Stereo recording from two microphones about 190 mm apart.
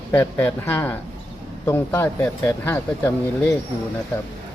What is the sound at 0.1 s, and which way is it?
Speech, 10° left (ahead or behind).